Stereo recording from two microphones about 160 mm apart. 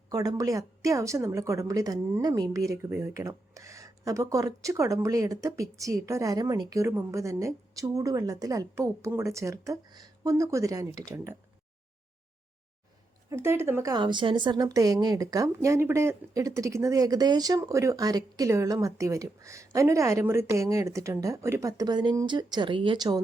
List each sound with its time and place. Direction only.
0.1 s a woman's voice: 25° right (ahead or behind)
13.3 s speech: 15° right (ahead or behind)
13.9 s a woman's voice: 30° right (ahead or behind)